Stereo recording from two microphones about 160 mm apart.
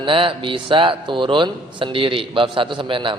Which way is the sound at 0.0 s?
35° right (ahead or behind).